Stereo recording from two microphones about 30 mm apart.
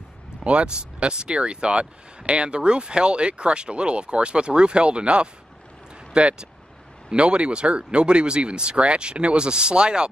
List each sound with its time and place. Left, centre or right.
0.4 s speech: right
0.7 s speech: right